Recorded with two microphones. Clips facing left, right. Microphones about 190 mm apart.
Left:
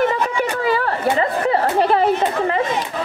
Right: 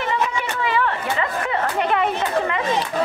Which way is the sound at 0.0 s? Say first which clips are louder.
Left 5 dB; 40° left (ahead or behind).